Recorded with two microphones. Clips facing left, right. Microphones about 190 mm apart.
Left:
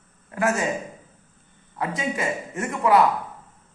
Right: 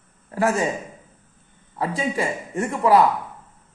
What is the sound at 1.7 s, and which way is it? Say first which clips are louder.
A man's voice: right 3 dB; 35° right (ahead or behind).